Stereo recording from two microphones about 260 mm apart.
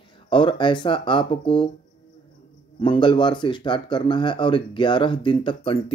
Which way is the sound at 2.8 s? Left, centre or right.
Centre.